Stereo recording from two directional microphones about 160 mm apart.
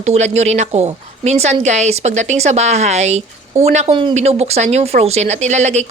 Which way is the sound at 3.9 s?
30° right (ahead or behind).